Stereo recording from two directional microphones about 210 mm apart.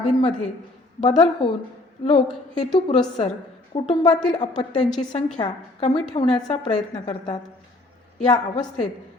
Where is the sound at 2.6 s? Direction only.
25° left (ahead or behind).